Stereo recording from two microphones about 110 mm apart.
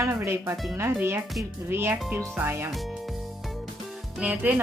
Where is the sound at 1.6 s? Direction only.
20° right (ahead or behind).